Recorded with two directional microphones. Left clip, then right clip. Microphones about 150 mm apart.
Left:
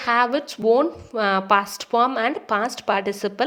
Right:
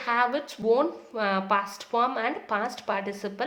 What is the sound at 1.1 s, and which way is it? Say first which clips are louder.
Speech: left 7 dB; 50° left (ahead or behind).